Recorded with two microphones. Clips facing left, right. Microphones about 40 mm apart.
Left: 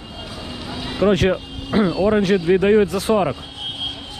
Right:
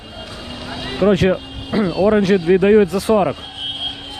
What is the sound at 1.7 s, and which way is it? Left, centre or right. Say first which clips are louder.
Speech: even; left.